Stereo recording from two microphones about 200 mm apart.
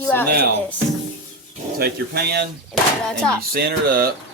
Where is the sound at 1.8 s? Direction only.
50° right (ahead or behind).